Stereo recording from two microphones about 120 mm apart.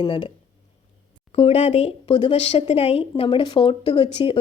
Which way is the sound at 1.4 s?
55° left (ahead or behind).